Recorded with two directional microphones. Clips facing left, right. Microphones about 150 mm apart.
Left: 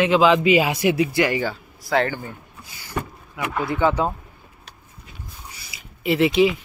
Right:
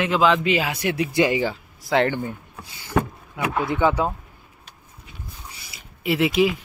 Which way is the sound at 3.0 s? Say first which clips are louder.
Right 6 dB; 90° right.